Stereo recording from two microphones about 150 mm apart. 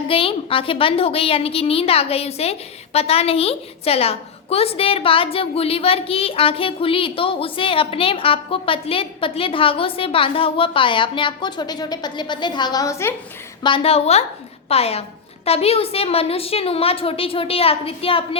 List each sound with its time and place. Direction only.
0.1 s a woman's voice: 40° left (ahead or behind); by 13.1 s 20° left (ahead or behind)
13.6 s a woman's voice: 35° left (ahead or behind)